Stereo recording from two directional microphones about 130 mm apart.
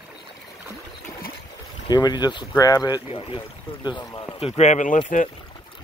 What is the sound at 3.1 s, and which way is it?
Speech, 45° left (ahead or behind).